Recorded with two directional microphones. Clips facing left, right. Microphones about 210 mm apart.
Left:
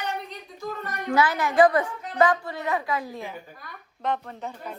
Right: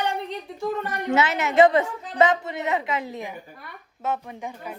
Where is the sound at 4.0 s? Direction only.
10° right (ahead or behind).